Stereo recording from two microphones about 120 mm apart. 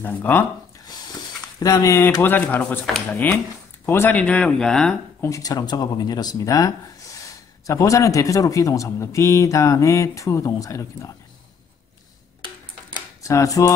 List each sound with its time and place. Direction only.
0.0 s speech: 15° left (ahead or behind)
1.6 s a man's voice: 30° left (ahead or behind); by 4.9 s 5° left (ahead or behind)
5.2 s a man's voice: 30° left (ahead or behind)
13.2 s a man's voice: 25° left (ahead or behind)